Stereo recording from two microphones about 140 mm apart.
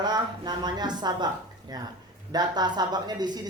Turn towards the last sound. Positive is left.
turn(degrees=-30)  # may be behind; listen again after turning